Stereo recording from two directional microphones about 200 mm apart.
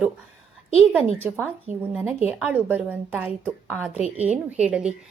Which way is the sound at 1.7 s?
35° right (ahead or behind).